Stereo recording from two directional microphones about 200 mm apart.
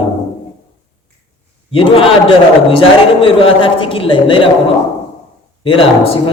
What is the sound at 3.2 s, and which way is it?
Speech, 25° left (ahead or behind).